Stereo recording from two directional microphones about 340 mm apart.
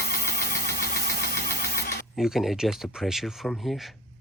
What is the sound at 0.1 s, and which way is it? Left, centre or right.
Engine, left.